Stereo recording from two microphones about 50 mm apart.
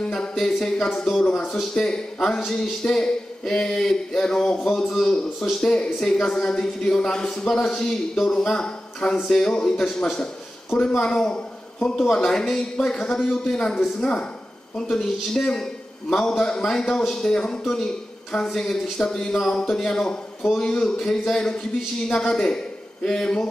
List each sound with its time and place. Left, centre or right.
0.0 s speech: centre
0.3 s speech: centre
1.2 s speech: centre
14.8 s speech: centre